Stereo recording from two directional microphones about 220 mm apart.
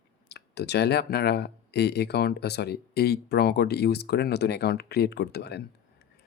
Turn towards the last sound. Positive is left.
turn(degrees=45)  # may be behind; listen again after turning